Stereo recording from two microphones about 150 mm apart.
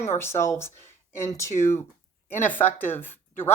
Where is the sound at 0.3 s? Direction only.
15° left (ahead or behind).